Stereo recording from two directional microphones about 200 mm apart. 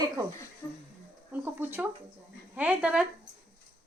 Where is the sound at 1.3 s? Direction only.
10° right (ahead or behind).